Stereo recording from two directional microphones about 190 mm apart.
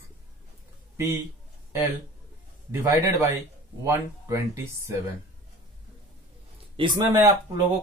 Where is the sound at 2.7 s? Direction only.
15° right (ahead or behind).